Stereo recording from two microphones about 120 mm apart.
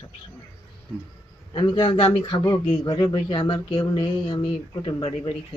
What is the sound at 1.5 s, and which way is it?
Speech, 40° left (ahead or behind).